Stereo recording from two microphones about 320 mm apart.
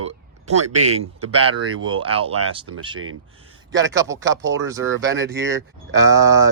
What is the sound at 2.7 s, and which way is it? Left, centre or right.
Speech, right.